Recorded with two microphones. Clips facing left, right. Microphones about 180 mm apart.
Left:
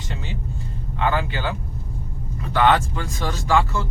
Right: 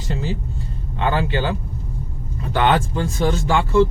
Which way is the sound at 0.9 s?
30° right (ahead or behind).